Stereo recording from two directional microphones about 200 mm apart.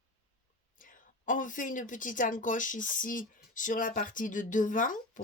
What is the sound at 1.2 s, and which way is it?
Speech, 40° left (ahead or behind).